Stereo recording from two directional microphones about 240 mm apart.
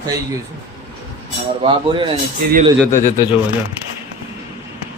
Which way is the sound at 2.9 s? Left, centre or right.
Left.